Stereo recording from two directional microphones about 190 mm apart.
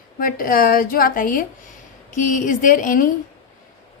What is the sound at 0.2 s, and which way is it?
A woman's voice, 50° left (ahead or behind).